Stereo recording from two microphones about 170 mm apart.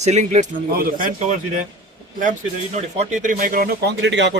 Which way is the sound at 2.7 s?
45° right (ahead or behind).